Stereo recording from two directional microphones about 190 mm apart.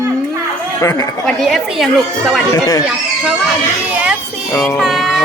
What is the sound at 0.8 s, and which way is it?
Speech, 20° left (ahead or behind).